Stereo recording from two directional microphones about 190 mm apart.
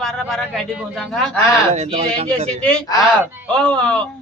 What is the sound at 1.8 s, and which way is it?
Speech, 35° right (ahead or behind).